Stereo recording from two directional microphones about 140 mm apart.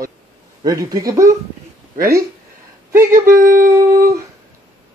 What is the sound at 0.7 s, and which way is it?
Speech, 25° right (ahead or behind).